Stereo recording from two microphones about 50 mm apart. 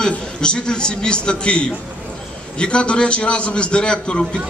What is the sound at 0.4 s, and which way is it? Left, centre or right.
A man's voice, centre.